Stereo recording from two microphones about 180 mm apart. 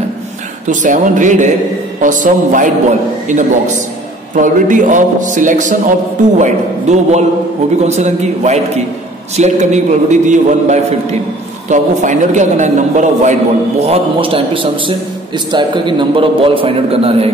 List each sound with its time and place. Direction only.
0.7 s a man's voice: 45° right (ahead or behind)